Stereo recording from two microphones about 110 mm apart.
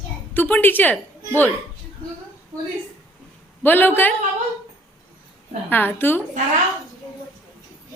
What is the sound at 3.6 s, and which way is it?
Speech, 20° left (ahead or behind).